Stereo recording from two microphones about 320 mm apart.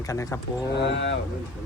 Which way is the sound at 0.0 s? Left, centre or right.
Centre.